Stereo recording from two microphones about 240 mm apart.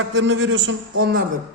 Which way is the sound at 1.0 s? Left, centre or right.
Right.